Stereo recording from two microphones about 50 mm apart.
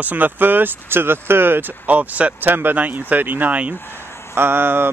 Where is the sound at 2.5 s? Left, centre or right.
Right.